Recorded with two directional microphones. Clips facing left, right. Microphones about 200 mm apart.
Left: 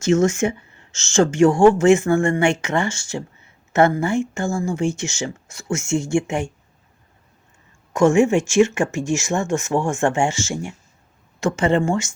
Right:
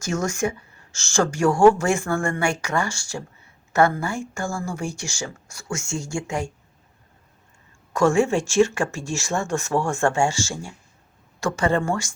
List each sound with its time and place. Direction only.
0.0 s a woman's voice: 25° left (ahead or behind)
7.9 s a woman's voice: 20° left (ahead or behind)